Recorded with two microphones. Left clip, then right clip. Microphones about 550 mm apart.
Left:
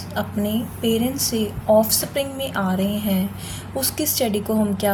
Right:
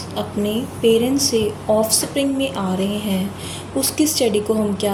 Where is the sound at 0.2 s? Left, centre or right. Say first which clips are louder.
Right 2 dB; left.